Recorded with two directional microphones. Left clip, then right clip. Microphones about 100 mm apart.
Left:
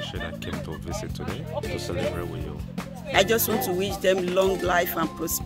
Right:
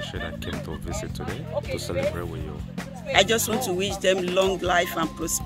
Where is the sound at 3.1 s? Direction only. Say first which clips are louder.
Right 1 dB; 15° left (ahead or behind).